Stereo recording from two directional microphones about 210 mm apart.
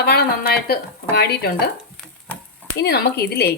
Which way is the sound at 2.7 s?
50° left (ahead or behind).